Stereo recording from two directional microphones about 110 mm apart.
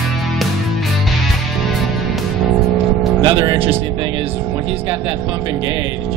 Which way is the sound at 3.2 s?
40° right (ahead or behind).